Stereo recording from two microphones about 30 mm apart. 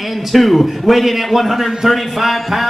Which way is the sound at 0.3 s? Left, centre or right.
Centre.